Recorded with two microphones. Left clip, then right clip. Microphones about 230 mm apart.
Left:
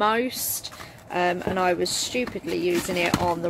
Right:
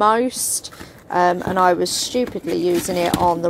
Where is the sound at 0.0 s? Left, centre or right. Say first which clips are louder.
Right 6 dB; centre.